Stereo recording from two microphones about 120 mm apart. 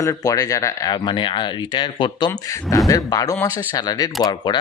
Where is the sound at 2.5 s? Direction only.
30° left (ahead or behind).